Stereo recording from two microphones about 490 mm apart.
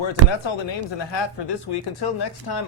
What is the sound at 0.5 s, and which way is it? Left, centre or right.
Speech, left.